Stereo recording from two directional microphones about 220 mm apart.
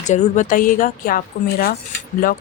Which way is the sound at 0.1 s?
35° left (ahead or behind).